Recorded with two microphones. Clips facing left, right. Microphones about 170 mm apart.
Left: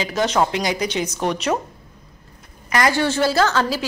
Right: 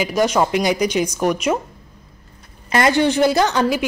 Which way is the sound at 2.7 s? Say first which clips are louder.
Right 3 dB; 25° right (ahead or behind).